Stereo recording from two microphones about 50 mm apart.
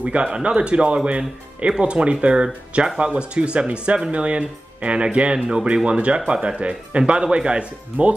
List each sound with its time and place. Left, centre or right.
0.0 s speech: right